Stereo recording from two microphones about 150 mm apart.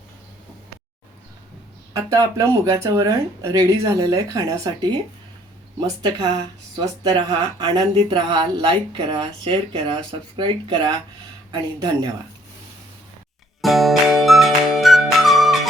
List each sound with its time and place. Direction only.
1.9 s speech: 20° right (ahead or behind)
13.6 s music: centre (ahead or behind)